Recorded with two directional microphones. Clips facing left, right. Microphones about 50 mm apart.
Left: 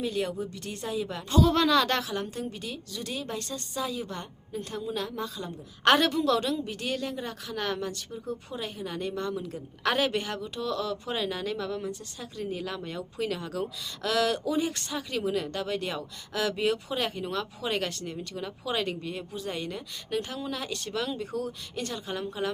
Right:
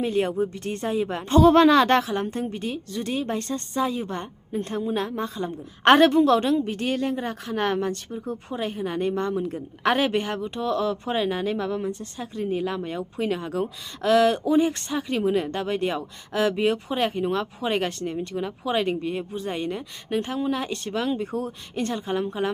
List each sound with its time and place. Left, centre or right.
0.0 s a woman's voice: right